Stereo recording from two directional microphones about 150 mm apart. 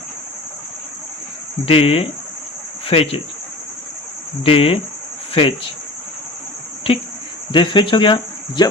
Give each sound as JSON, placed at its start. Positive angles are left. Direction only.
{"t": 1.6, "sound": "speech", "side_deg": 40}
{"t": 4.4, "sound": "speech", "side_deg": 40}
{"t": 7.5, "sound": "speech", "side_deg": 35}